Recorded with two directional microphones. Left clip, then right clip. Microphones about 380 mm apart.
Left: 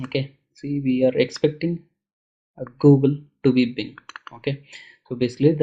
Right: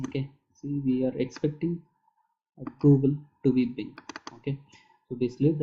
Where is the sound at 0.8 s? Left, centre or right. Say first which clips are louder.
Left 9 dB; centre.